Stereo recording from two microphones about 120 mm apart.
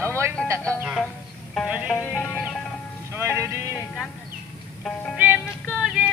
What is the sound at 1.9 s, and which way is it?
Music, 15° left (ahead or behind).